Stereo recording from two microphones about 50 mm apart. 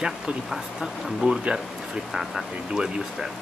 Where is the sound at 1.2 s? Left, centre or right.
Right.